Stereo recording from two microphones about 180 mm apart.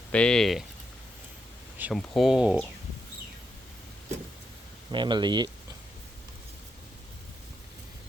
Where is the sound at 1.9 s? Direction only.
Centre (ahead or behind).